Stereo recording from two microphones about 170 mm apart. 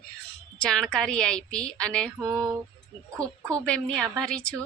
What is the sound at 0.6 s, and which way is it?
A woman's voice, 5° left (ahead or behind).